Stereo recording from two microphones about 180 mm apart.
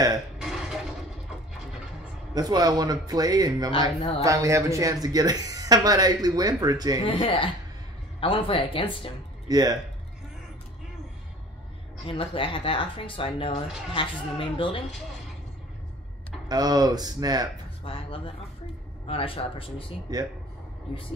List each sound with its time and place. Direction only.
0.4 s burping: 5° right (ahead or behind)
2.3 s speech: 20° right (ahead or behind)
3.7 s speech: 25° left (ahead or behind)
4.2 s speech: 15° right (ahead or behind)
7.1 s speech: 30° left (ahead or behind)
9.5 s speech: 20° right (ahead or behind)
12.1 s speech: 30° left (ahead or behind)
16.4 s speech: 20° right (ahead or behind)
17.8 s speech: 30° left (ahead or behind)
20.1 s speech: 20° right (ahead or behind)